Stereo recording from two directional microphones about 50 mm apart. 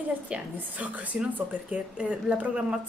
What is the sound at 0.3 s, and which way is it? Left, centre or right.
Speech, right.